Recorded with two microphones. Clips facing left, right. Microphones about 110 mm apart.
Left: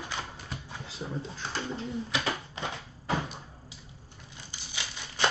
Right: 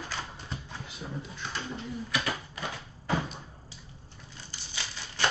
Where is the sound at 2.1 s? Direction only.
25° left (ahead or behind).